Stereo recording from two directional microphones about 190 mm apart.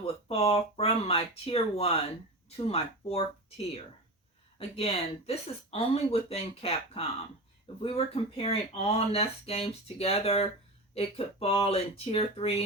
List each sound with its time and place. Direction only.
0.0 s speech: 30° left (ahead or behind)
4.5 s speech: 30° left (ahead or behind)